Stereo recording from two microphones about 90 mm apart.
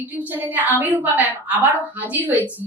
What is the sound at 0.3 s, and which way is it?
A woman's voice, 20° right (ahead or behind).